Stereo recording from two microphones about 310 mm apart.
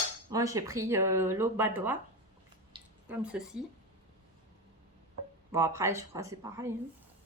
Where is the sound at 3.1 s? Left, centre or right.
Centre.